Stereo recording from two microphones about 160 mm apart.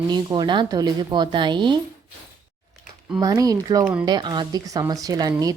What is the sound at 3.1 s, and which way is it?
Speech, 20° right (ahead or behind).